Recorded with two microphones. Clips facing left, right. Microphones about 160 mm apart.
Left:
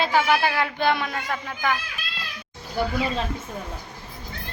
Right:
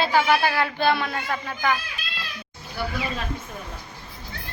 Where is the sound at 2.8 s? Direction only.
45° left (ahead or behind).